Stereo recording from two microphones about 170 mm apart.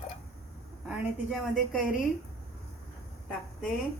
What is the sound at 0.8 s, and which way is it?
A woman's voice, 5° right (ahead or behind).